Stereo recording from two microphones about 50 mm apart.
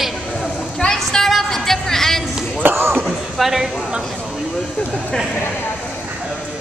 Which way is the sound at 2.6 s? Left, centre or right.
Right.